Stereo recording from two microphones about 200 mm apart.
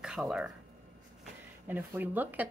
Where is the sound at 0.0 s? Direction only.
5° right (ahead or behind).